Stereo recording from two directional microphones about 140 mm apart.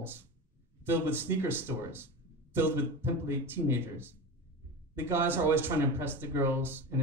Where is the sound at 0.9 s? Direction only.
15° right (ahead or behind).